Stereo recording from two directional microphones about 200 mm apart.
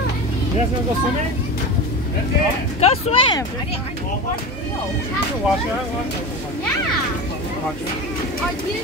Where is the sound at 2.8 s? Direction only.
30° left (ahead or behind).